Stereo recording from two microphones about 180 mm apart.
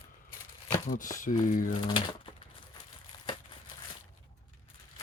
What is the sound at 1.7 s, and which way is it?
Speech, 25° left (ahead or behind).